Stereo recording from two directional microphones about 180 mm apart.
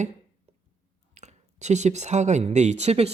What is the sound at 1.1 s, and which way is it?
Speech, 40° right (ahead or behind).